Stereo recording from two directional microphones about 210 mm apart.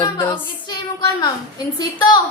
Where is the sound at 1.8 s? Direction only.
20° left (ahead or behind).